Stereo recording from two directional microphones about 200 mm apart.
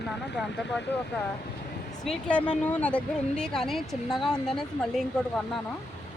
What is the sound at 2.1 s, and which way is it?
Speech, 5° left (ahead or behind).